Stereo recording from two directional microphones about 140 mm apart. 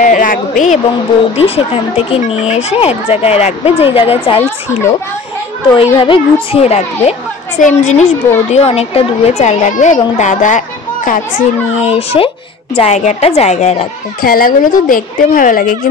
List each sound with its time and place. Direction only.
0.0 s a woman's voice: 70° left (ahead or behind)
1.3 s a woman's voice: 45° left (ahead or behind)
5.8 s a woman's voice: 40° left (ahead or behind); by 10.6 s 60° left (ahead or behind)
11.8 s a woman's voice: 45° left (ahead or behind)
14.2 s speech: 90° left